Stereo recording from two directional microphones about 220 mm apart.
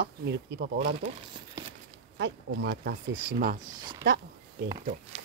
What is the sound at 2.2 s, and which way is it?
Speech, 50° right (ahead or behind).